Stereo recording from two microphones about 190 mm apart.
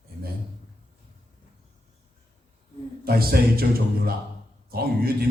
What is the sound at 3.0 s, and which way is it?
Speech, 50° right (ahead or behind).